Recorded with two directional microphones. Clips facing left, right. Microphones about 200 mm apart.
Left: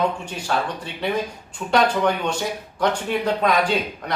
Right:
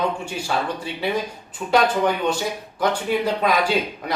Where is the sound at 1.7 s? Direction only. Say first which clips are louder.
Even; 5° right (ahead or behind).